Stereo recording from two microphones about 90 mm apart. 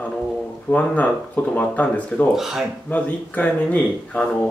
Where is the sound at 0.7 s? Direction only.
15° left (ahead or behind).